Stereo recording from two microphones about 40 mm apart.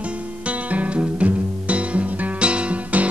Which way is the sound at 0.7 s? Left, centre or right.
Right.